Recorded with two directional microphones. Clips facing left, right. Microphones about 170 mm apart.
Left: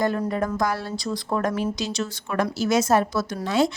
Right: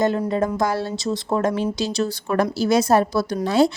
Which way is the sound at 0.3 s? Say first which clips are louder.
Right 3 dB; 25° right (ahead or behind).